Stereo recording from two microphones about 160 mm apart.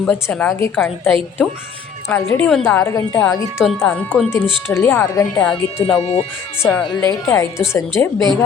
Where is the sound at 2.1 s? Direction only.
5° left (ahead or behind).